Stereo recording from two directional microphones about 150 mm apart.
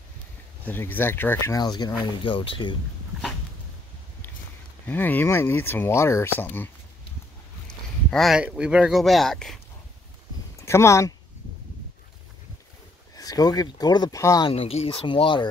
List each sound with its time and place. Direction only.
0.7 s speech: 15° left (ahead or behind); by 2.7 s 35° left (ahead or behind)
4.8 s speech: 10° left (ahead or behind)
10.6 s speech: 20° left (ahead or behind)
13.1 s speech: 25° left (ahead or behind)
14.5 s speech: 40° left (ahead or behind)